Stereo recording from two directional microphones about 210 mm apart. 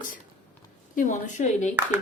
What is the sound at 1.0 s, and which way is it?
Speech, 35° left (ahead or behind).